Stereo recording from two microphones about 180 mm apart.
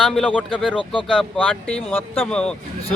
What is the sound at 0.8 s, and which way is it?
Speech, 25° left (ahead or behind).